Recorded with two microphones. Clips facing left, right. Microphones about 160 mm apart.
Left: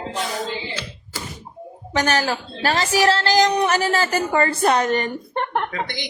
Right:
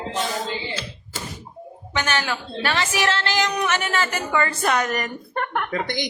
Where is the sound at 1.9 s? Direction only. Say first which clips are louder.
Left 4 dB; 40° left (ahead or behind).